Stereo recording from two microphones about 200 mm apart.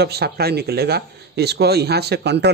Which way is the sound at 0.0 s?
55° right (ahead or behind).